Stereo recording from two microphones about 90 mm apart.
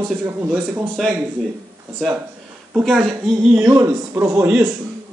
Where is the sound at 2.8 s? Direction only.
Centre (ahead or behind).